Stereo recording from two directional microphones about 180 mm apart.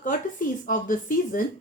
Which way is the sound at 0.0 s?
50° left (ahead or behind).